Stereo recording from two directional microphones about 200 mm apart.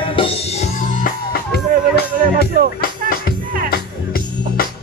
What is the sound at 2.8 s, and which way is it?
Music, 50° left (ahead or behind).